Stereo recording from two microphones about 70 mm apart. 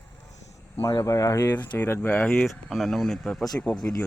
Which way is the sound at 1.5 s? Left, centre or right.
Left.